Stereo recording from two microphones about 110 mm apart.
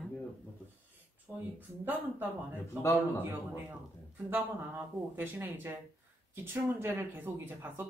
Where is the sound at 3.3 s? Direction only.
20° right (ahead or behind).